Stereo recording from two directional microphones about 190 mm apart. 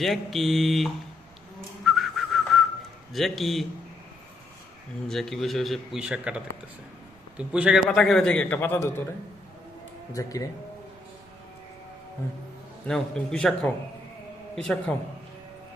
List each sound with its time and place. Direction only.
0.0 s a man's voice: centre (ahead or behind)
1.8 s whistling: centre (ahead or behind)
3.1 s a man's voice: centre (ahead or behind)
5.0 s a man's voice: centre (ahead or behind)
10.1 s speech: 15° left (ahead or behind)
12.9 s a man's voice: 5° left (ahead or behind)